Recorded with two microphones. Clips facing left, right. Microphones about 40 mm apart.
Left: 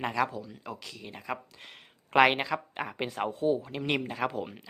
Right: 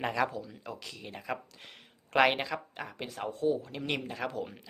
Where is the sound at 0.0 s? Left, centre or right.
Centre.